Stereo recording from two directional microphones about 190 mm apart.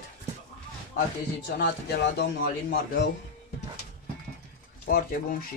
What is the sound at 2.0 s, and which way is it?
Speech, 60° left (ahead or behind).